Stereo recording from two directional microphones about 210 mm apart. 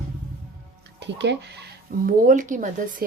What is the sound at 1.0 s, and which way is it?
Speech, 55° right (ahead or behind).